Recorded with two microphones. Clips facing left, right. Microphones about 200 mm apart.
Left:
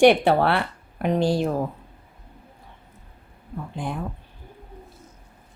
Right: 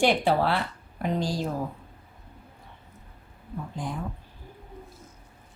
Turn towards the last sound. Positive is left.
turn(degrees=60)  # may be behind; listen again after turning